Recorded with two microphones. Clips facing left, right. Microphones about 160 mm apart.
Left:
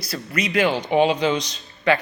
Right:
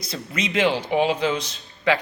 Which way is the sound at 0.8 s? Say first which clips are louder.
Left 3 dB; 5° right (ahead or behind).